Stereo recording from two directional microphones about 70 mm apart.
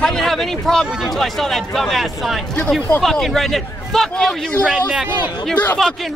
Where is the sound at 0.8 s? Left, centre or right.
Centre.